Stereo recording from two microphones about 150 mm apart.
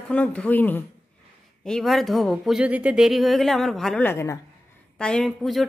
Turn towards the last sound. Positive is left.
turn(degrees=0)  # may be behind; listen again after turning